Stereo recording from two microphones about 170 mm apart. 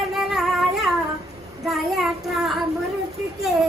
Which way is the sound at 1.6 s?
Centre (ahead or behind).